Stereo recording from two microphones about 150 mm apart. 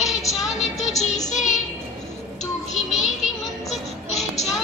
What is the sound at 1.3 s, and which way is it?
Child singing, 55° left (ahead or behind).